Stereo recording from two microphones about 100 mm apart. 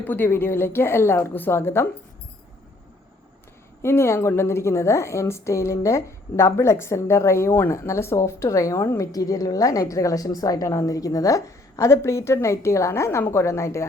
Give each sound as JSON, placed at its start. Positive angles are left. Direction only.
{"t": 0.0, "sound": "a woman's voice", "side_deg": 20}
{"t": 3.8, "sound": "a woman's voice", "side_deg": 25}